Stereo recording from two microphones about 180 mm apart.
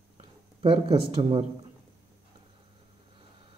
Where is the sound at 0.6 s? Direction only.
30° right (ahead or behind).